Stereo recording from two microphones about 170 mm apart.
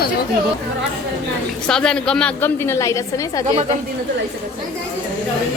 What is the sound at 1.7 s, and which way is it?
A woman's voice, 5° left (ahead or behind).